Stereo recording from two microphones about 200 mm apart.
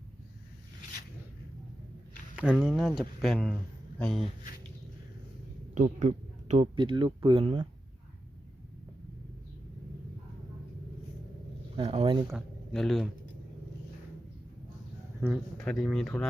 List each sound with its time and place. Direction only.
2.3 s speech: 5° right (ahead or behind)
5.7 s speech: 35° right (ahead or behind)
11.8 s speech: 30° right (ahead or behind)
12.3 s speech: centre (ahead or behind)
15.2 s speech: 15° right (ahead or behind)
15.5 s speech: 5° left (ahead or behind)